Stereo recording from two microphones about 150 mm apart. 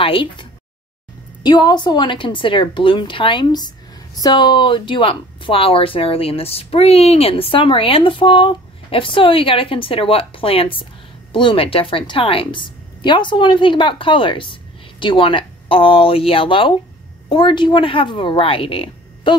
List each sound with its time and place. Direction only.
0.0 s a woman's voice: 35° left (ahead or behind)